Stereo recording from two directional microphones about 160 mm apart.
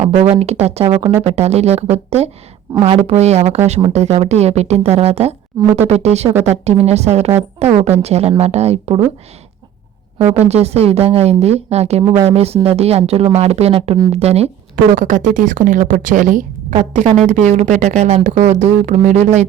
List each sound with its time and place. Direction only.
0.0 s speech: 40° right (ahead or behind)
10.2 s speech: 15° right (ahead or behind)
10.5 s speech: 40° right (ahead or behind)
12.0 s speech: 25° right (ahead or behind)
12.3 s speech: 40° right (ahead or behind)
14.9 s a woman's voice: 55° right (ahead or behind)